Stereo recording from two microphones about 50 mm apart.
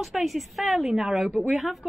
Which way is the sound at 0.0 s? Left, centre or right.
Centre.